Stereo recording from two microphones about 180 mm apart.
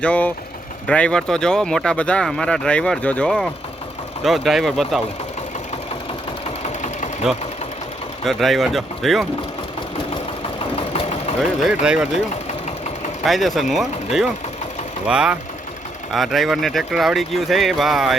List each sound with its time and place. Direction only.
0.0 s speech: 10° left (ahead or behind)
8.2 s speech: centre (ahead or behind)
10.8 s engine: 35° left (ahead or behind)
11.3 s speech: 5° right (ahead or behind)
13.2 s speech: centre (ahead or behind)